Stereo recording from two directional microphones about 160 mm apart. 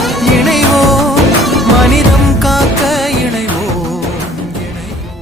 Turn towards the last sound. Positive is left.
turn(degrees=0)  # may be behind; listen again after turning